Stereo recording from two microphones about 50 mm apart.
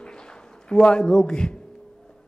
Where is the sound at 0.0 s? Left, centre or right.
Centre.